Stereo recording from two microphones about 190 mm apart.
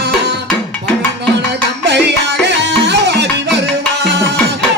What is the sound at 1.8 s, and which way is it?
Music, 60° right (ahead or behind).